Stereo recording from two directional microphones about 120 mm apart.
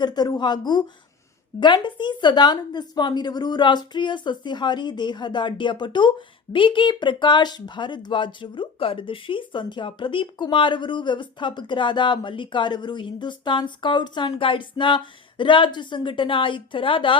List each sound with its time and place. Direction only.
0.0 s a woman's voice: 35° left (ahead or behind)